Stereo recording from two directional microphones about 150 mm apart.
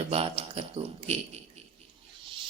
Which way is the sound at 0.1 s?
40° right (ahead or behind).